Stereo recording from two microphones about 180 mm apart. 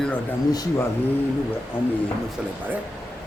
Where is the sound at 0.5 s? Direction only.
20° left (ahead or behind).